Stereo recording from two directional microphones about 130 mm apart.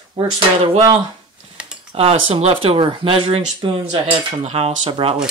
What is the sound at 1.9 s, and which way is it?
Speech, 50° right (ahead or behind).